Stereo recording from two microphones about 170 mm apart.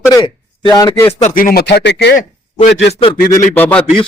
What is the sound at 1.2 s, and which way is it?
A man's voice, 55° left (ahead or behind).